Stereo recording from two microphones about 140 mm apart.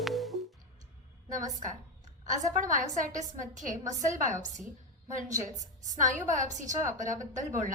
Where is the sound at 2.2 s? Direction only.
65° right (ahead or behind).